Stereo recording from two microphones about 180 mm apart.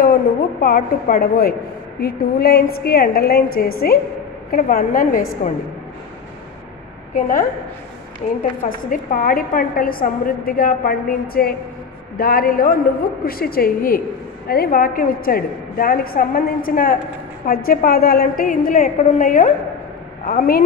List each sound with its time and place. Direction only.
0.0 s a woman's voice: 50° left (ahead or behind)
7.2 s a woman's voice: 50° left (ahead or behind)